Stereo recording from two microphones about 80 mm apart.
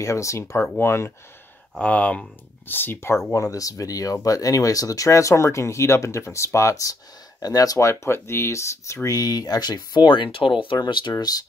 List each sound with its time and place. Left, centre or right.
0.0 s speech: left
1.8 s speech: centre
2.7 s speech: left
7.9 s speech: left
10.9 s speech: left